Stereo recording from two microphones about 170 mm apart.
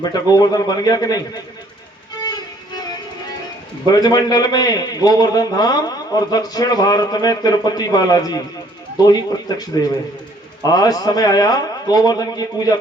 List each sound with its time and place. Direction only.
0.0 s a man's voice: 20° left (ahead or behind)
2.2 s music: 25° left (ahead or behind)
3.8 s a man's voice: 20° left (ahead or behind)